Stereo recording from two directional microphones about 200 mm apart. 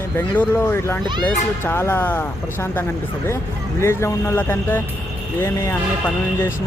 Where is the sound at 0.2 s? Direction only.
10° left (ahead or behind).